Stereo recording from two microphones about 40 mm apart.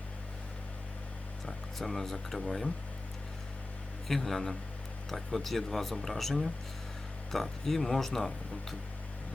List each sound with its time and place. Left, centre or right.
1.5 s speech: centre
4.1 s speech: centre